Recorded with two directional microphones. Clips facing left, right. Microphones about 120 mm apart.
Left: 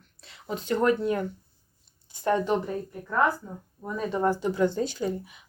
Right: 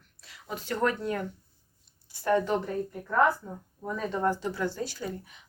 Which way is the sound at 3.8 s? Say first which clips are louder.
Left 2 dB; 10° left (ahead or behind).